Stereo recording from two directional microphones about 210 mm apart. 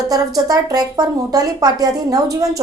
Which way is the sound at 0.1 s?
15° right (ahead or behind).